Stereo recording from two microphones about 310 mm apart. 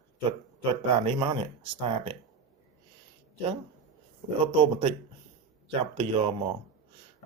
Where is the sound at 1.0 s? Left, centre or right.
Centre.